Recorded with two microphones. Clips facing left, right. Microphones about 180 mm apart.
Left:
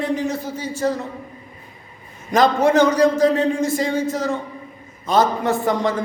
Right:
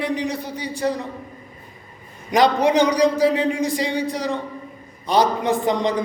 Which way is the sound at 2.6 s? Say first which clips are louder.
Left 2 dB; 15° right (ahead or behind).